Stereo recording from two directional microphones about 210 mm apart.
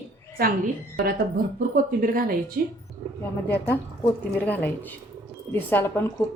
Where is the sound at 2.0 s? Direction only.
45° right (ahead or behind).